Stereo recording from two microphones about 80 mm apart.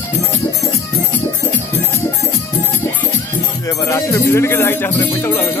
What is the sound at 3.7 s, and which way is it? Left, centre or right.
Speech, left.